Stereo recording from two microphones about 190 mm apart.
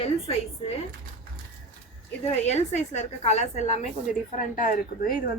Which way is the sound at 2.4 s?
35° left (ahead or behind).